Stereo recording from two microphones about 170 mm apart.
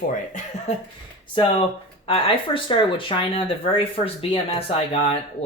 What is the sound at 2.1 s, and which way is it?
Speech, 35° left (ahead or behind).